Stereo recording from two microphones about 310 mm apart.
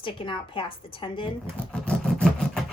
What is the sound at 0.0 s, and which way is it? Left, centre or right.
Speech, centre.